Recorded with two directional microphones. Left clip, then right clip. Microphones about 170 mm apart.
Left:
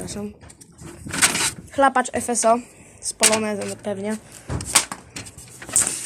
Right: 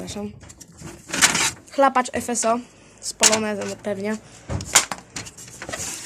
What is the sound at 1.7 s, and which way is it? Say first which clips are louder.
Speech: even; 5° right (ahead or behind).